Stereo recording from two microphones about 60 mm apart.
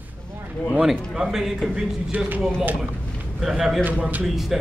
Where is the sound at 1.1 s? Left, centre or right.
Centre.